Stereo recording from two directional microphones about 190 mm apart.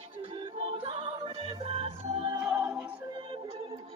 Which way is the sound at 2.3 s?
15° right (ahead or behind).